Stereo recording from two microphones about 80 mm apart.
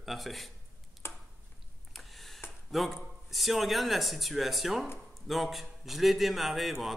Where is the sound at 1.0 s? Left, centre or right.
Left.